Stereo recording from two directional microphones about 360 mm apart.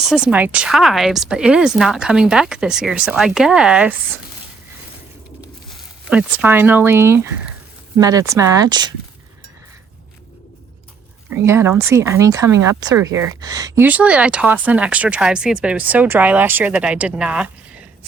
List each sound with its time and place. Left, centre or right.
0.0 s speech: centre
5.6 s speech: centre
11.3 s speech: centre